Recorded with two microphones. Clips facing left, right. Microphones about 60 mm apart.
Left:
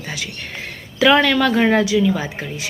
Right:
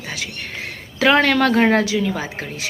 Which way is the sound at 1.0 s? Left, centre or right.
Right.